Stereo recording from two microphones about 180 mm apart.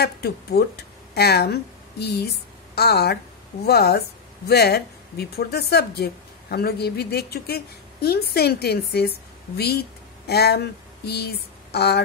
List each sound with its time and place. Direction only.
0.0 s a woman's voice: 60° left (ahead or behind)